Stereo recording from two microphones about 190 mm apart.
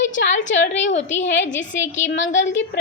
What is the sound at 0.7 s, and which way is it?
Speech, 35° left (ahead or behind).